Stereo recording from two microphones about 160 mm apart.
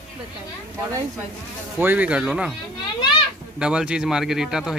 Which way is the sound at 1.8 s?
10° right (ahead or behind).